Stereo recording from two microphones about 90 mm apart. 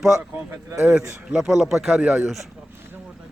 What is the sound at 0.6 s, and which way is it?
Speech, 30° right (ahead or behind).